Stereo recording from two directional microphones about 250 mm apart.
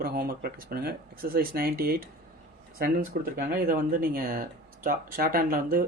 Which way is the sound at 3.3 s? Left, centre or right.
Right.